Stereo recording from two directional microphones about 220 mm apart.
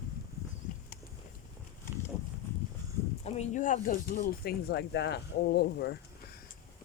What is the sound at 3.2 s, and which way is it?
Speech, 30° left (ahead or behind).